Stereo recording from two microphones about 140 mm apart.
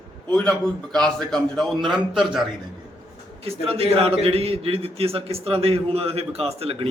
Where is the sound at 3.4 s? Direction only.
45° right (ahead or behind).